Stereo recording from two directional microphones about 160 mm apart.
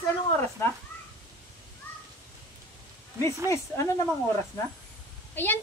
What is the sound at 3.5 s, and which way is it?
Speech, 20° left (ahead or behind).